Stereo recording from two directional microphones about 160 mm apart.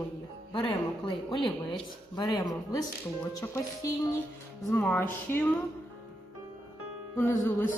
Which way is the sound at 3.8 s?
20° left (ahead or behind).